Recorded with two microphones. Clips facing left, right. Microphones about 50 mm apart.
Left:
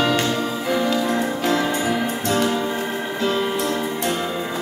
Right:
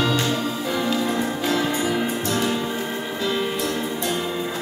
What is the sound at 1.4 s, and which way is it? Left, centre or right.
Music, left.